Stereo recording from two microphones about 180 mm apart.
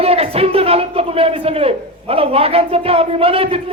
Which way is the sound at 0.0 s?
35° right (ahead or behind).